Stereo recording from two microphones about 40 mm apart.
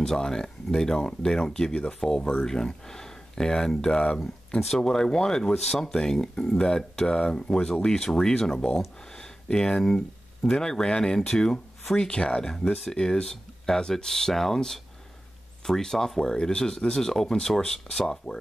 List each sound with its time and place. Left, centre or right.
0.0 s speech: centre